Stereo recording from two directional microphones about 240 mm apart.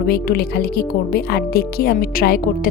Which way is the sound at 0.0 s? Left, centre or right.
Left.